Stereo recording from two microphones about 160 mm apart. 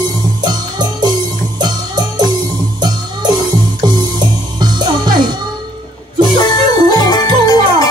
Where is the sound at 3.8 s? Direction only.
25° right (ahead or behind).